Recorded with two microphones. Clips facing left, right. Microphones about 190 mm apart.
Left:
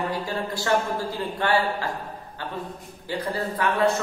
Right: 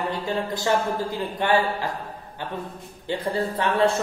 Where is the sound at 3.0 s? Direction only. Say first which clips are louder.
Right 3 dB; 25° right (ahead or behind).